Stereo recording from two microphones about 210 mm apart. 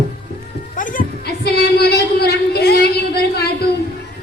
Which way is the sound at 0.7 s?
40° left (ahead or behind).